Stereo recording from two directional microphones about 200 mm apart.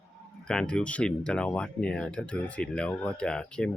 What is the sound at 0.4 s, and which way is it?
Speech, 5° left (ahead or behind).